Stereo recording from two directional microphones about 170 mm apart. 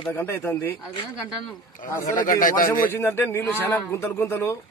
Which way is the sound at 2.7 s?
15° left (ahead or behind).